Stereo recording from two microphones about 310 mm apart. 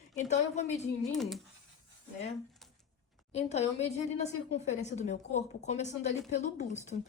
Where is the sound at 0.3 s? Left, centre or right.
Left.